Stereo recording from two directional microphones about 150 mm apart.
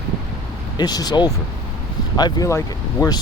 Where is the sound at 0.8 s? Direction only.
25° left (ahead or behind).